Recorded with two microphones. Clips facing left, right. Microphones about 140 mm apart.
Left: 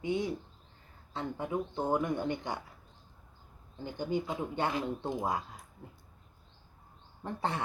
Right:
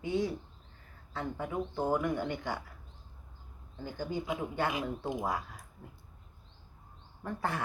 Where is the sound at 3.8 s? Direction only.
20° left (ahead or behind).